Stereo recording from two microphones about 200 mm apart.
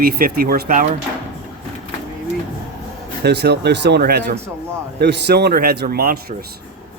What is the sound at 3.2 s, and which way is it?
A man's voice, 55° right (ahead or behind).